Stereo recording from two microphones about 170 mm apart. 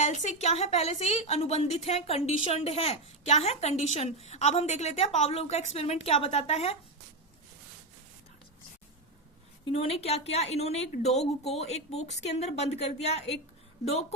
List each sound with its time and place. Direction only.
0.0 s a woman's voice: 45° left (ahead or behind)
9.6 s a woman's voice: 35° left (ahead or behind)